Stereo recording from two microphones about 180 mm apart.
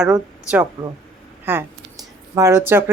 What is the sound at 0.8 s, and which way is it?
Speech, 25° right (ahead or behind).